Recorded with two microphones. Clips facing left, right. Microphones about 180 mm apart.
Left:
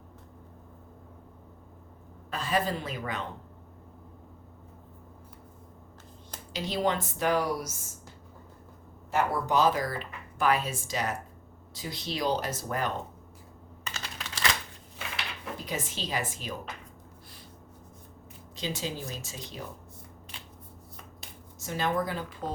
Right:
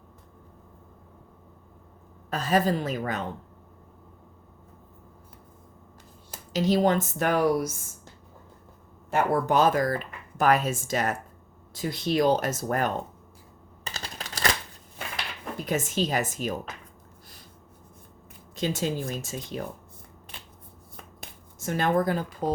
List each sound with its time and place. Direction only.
2.3 s a woman's voice: 40° right (ahead or behind)
6.5 s a woman's voice: 40° right (ahead or behind)
9.0 s a woman's voice: 55° right (ahead or behind)
13.8 s typing: 35° right (ahead or behind)
15.6 s a woman's voice: 45° right (ahead or behind)
18.5 s a woman's voice: 50° right (ahead or behind)
20.9 s finger snapping: 55° right (ahead or behind)